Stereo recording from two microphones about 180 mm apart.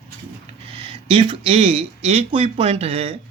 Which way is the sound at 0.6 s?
30° right (ahead or behind).